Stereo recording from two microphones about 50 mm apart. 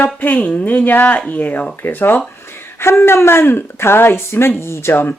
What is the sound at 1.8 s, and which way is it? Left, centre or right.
Speech, left.